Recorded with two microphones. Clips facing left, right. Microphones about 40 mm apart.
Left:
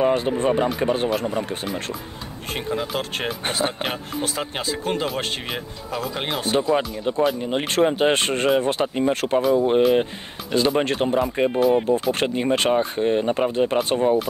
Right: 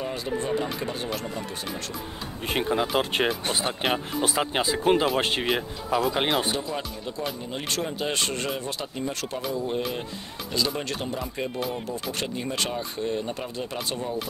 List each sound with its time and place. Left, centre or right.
0.0 s speech: left
2.5 s speech: centre
7.1 s speech: left